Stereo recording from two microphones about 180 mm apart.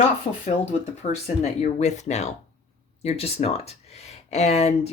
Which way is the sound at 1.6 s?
40° left (ahead or behind).